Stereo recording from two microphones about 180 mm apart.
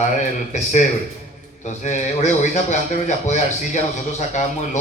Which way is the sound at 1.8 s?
40° left (ahead or behind).